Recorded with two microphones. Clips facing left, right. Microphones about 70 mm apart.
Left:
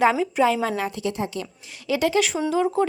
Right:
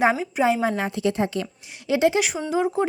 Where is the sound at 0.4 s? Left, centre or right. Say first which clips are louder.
Right 1 dB; right.